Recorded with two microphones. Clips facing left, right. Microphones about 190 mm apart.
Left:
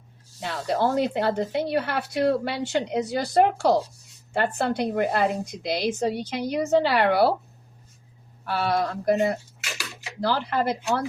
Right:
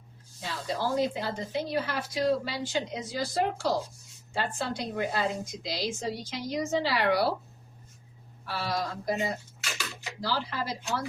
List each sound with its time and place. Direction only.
0.3 s speech: 70° left (ahead or behind)
8.4 s speech: 60° left (ahead or behind)